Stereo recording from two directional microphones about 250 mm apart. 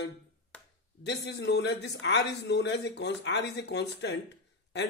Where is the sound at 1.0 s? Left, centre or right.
Left.